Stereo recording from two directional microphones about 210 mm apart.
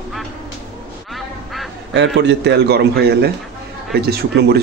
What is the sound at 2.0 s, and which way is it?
A man's voice, 55° right (ahead or behind).